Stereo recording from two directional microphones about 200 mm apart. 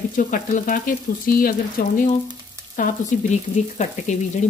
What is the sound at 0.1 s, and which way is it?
Frying, 40° left (ahead or behind).